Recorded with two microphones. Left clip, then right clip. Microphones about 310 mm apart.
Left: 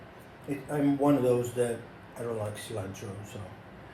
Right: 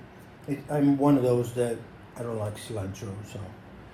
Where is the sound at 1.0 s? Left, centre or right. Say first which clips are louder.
Right 2 dB; centre.